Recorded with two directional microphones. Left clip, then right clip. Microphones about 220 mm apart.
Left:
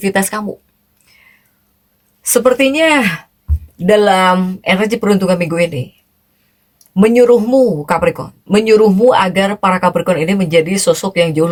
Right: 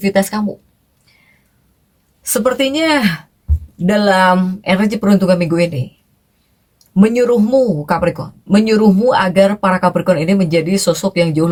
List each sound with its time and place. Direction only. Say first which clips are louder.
0.0 s speech: even; 35° left (ahead or behind)
2.2 s speech: left 4 dB; 30° left (ahead or behind)
6.9 s speech: left 4 dB; 30° left (ahead or behind)